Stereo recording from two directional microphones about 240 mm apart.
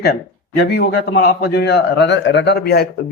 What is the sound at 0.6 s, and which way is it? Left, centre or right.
Speech, left.